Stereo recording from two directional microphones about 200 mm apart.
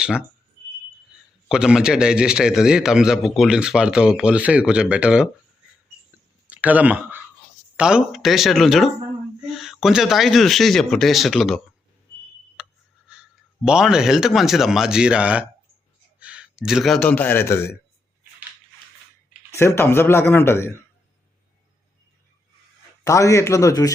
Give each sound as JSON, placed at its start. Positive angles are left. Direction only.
{"t": 0.0, "sound": "speech", "side_deg": -5}
{"t": 1.5, "sound": "a man's voice", "side_deg": -5}
{"t": 6.5, "sound": "a man's voice", "side_deg": -5}
{"t": 12.6, "sound": "a sound", "side_deg": -5}
{"t": 13.7, "sound": "a man's voice", "side_deg": -5}
{"t": 19.5, "sound": "speech", "side_deg": 10}
{"t": 23.0, "sound": "speech", "side_deg": 15}